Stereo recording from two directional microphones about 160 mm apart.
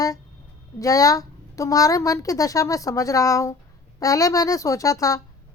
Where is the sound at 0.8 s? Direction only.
20° left (ahead or behind).